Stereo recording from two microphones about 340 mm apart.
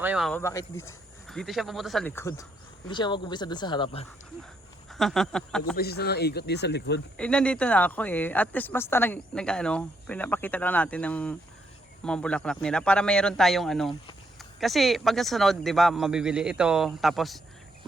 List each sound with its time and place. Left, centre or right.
0.0 s speech: centre
4.9 s speech: centre
5.7 s speech: left
7.2 s speech: centre